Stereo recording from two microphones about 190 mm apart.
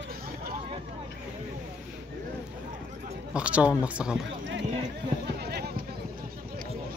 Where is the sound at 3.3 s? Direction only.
5° right (ahead or behind).